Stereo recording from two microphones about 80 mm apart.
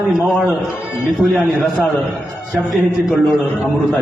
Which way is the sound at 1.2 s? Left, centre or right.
Centre.